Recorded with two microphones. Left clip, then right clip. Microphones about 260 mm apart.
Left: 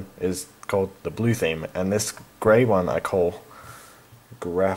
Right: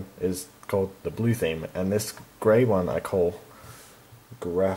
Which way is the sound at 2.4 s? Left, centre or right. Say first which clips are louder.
Left 3 dB; centre.